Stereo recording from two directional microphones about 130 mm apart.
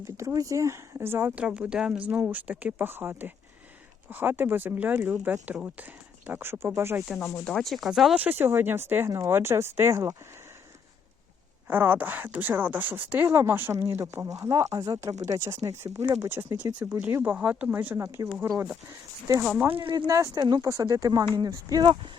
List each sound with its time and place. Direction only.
0.0 s speech: 25° right (ahead or behind)
7.3 s speech: 5° left (ahead or behind)
8.2 s speech: 15° right (ahead or behind)
11.7 s speech: 15° right (ahead or behind)
19.4 s speech: 10° right (ahead or behind)
19.7 s speech: 40° right (ahead or behind)
20.1 s speech: 25° right (ahead or behind)